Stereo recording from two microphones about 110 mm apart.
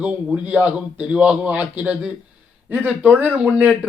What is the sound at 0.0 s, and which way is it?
Speech, 10° right (ahead or behind).